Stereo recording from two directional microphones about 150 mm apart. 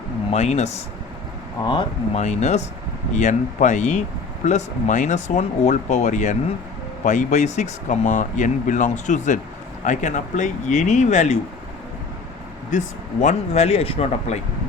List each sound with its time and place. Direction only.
0.3 s speech: 45° left (ahead or behind)
1.6 s speech: 30° left (ahead or behind)
2.1 s speech: 50° left (ahead or behind)
13.2 s speech: 45° left (ahead or behind)